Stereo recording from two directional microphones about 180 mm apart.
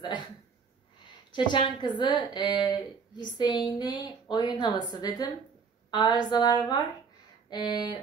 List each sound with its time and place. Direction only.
1.3 s a woman's voice: 25° left (ahead or behind)